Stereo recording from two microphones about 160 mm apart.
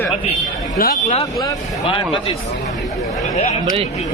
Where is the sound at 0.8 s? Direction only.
65° left (ahead or behind).